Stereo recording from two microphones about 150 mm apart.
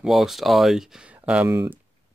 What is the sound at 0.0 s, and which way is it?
Speech, centre (ahead or behind).